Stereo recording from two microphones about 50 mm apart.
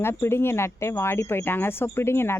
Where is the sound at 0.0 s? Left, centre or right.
Left.